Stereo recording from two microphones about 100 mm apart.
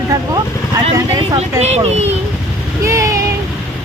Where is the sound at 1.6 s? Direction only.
90° right.